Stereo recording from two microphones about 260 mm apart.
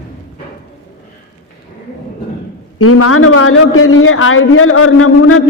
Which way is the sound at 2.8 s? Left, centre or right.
Left.